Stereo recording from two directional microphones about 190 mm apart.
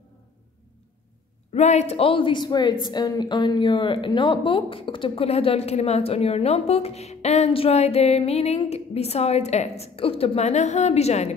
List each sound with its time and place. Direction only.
1.5 s a woman's voice: 35° left (ahead or behind)